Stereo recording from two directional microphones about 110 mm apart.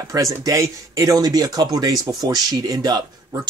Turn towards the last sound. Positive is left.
turn(degrees=-35)  # may be behind; listen again after turning